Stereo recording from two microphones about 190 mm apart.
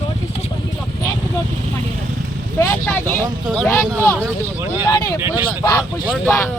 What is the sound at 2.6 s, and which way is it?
Speech, 10° left (ahead or behind).